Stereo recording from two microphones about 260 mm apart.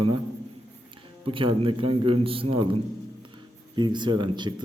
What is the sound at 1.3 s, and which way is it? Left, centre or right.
A man's voice, centre.